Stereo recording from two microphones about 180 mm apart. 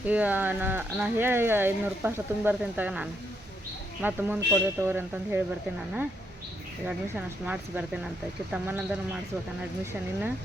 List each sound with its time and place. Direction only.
0.0 s speech: 10° right (ahead or behind)
6.8 s speech: 10° right (ahead or behind)